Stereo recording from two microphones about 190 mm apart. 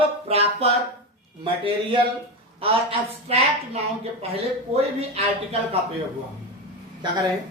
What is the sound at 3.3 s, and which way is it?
Speech, 30° right (ahead or behind).